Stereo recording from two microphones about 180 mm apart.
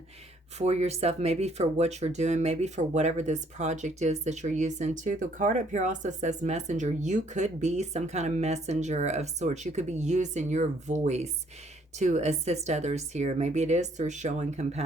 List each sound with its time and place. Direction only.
0.6 s speech: 35° right (ahead or behind)